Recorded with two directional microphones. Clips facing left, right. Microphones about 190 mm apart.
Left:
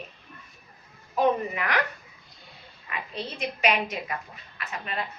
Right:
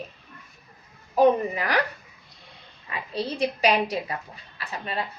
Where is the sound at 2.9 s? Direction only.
35° right (ahead or behind).